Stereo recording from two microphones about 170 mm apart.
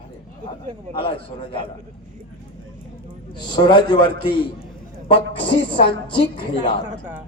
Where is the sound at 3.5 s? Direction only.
25° left (ahead or behind).